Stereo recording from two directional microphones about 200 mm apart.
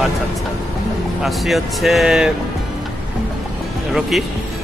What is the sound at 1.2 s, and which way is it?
Speech, centre (ahead or behind).